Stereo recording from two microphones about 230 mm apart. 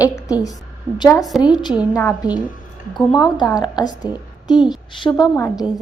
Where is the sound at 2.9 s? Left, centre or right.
Centre.